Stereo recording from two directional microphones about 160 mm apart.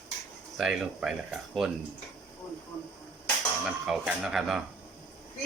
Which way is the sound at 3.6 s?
5° right (ahead or behind).